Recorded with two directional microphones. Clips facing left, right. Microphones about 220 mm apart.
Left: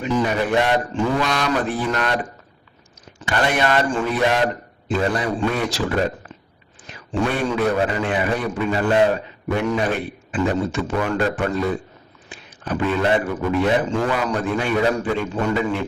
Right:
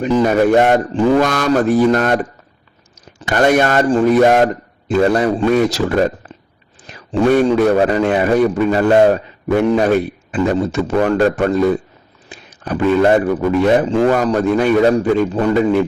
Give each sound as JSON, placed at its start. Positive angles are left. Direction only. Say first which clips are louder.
{"t": 0.0, "sound": "speech", "louder": "right 8 dB", "side_deg": -40}
{"t": 3.2, "sound": "speech", "louder": "right 8 dB", "side_deg": -45}
{"t": 7.1, "sound": "a man's voice", "louder": "right 9 dB", "side_deg": -40}
{"t": 13.8, "sound": "a man's voice", "louder": "right 8 dB", "side_deg": -35}